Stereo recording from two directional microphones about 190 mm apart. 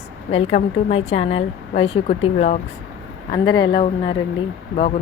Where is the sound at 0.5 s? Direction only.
35° left (ahead or behind).